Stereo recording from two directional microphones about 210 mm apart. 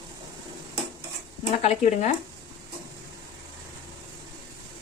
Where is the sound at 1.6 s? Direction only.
35° left (ahead or behind).